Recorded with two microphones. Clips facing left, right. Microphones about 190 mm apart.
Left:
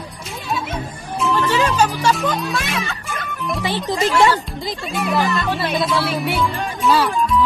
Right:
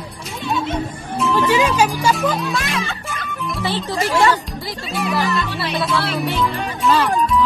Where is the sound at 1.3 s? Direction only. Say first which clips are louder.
Right 2 dB; 10° right (ahead or behind).